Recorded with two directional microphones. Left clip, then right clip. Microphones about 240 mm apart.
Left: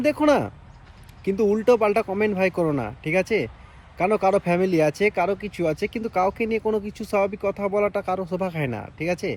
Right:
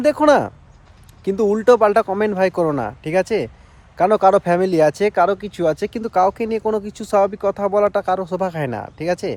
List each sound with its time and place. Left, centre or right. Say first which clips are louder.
0.0 s speech: right 6 dB; centre
5.4 s speech: right 3 dB; right
5.7 s speech: right 5 dB; centre